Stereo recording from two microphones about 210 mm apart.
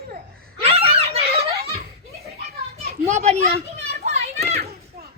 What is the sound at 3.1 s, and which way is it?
Children playing, 30° right (ahead or behind).